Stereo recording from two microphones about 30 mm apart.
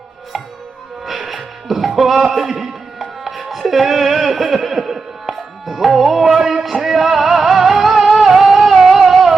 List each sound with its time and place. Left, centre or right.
1.0 s music: centre